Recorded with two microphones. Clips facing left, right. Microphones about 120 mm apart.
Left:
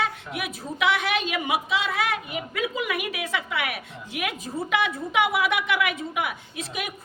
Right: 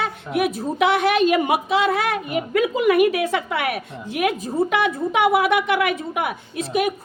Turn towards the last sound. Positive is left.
turn(degrees=-45)  # may be behind; listen again after turning